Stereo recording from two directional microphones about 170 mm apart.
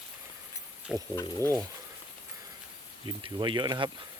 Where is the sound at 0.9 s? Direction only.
5° right (ahead or behind).